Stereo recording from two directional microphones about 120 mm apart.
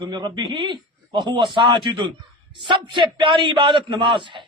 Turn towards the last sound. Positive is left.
turn(degrees=-45)  # may be behind; listen again after turning